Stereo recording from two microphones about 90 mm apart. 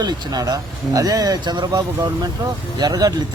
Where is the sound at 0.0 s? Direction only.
45° right (ahead or behind).